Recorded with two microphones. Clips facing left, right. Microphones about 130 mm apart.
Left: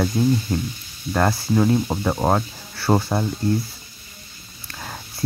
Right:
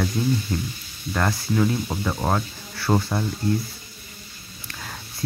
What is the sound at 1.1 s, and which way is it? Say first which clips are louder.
Speech: left 4 dB; 35° left (ahead or behind).